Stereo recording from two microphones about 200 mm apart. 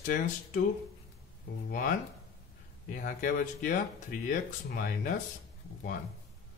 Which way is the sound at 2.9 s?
45° left (ahead or behind).